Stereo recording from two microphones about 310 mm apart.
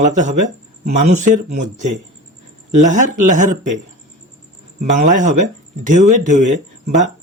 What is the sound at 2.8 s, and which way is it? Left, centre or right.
Speech, right.